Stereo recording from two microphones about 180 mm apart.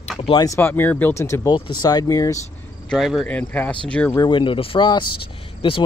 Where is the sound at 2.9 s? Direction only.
Centre (ahead or behind).